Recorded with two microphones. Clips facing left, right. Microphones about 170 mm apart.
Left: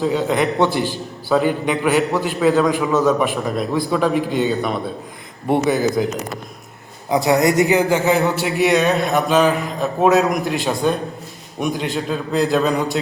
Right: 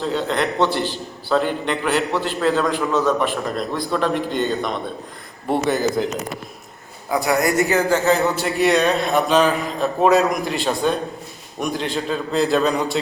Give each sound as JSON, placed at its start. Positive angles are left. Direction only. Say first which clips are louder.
{"t": 0.0, "sound": "a man's voice", "louder": "left 3 dB", "side_deg": 10}
{"t": 7.1, "sound": "a man's voice", "louder": "left 3 dB", "side_deg": 25}